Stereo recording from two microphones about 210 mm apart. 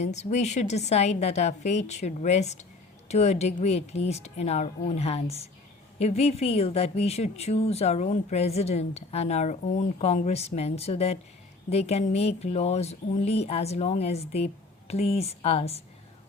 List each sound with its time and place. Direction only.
0.0 s a woman's voice: 30° left (ahead or behind)